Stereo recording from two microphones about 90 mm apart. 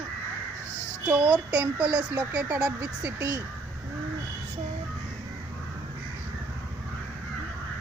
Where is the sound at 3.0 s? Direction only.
40° right (ahead or behind).